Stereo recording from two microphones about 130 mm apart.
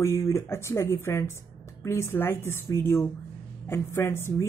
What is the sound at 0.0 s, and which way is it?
Speech, 20° left (ahead or behind).